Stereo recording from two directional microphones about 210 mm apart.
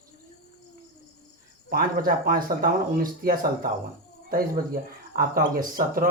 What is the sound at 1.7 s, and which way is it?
Speech, 45° right (ahead or behind).